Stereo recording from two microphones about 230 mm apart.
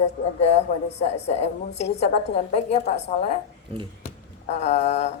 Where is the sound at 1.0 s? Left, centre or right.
Left.